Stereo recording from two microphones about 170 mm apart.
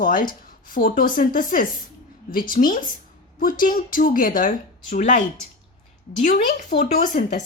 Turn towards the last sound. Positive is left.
turn(degrees=45)  # may be behind; listen again after turning